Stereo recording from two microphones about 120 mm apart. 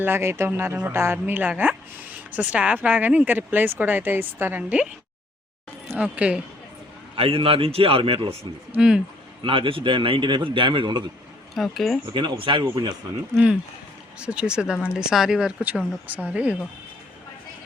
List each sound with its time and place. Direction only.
0.0 s speech: 20° right (ahead or behind)
6.0 s speech: 10° right (ahead or behind)
7.2 s a man's voice: 50° right (ahead or behind)
8.7 s speech: 5° right (ahead or behind)
9.4 s a man's voice: 45° right (ahead or behind)
11.5 s speech: centre (ahead or behind)
12.1 s a man's voice: 40° right (ahead or behind)
13.3 s speech: 10° right (ahead or behind)